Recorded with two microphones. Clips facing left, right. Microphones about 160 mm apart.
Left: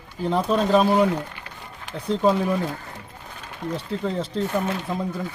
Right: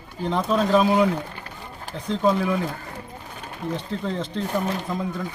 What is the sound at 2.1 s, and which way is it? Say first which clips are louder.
Speech: left 1 dB; 5° left (ahead or behind).